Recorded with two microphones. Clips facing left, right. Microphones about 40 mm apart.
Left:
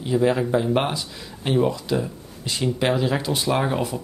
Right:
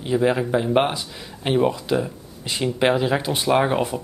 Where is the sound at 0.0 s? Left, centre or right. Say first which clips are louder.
Even; centre.